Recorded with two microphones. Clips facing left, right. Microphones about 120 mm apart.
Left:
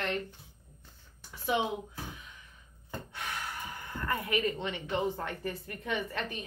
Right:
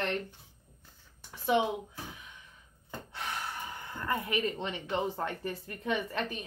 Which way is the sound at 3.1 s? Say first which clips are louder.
Right 2 dB; 30° right (ahead or behind).